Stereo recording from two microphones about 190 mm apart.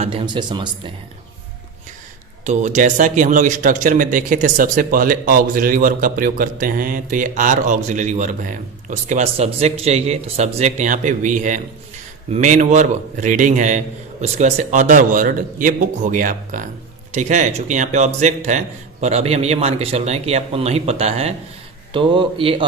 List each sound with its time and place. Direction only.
0.0 s speech: 30° right (ahead or behind)
2.4 s a man's voice: 40° right (ahead or behind)